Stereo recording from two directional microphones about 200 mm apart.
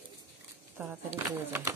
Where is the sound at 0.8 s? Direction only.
5° right (ahead or behind).